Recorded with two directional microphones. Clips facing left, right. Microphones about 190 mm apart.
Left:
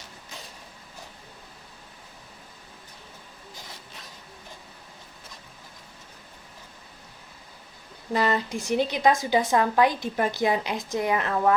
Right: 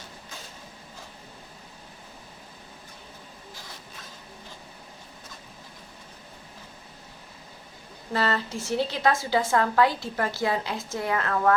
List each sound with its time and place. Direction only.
8.1 s a woman's voice: 15° left (ahead or behind)